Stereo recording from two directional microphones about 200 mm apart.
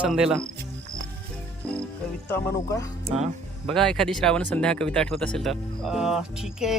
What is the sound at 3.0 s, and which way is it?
Speech, 35° right (ahead or behind).